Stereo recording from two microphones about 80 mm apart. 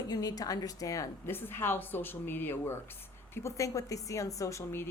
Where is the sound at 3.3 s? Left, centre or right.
Left.